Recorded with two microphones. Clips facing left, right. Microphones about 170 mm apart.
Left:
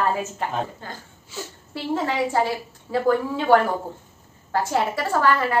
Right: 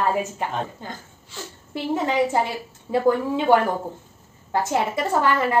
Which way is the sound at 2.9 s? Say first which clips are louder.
Right 1 dB; 20° right (ahead or behind).